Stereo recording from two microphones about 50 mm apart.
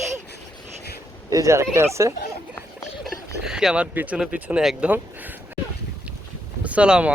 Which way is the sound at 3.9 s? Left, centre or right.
Right.